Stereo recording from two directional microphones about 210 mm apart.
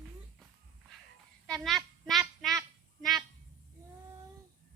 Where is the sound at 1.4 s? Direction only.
Centre (ahead or behind).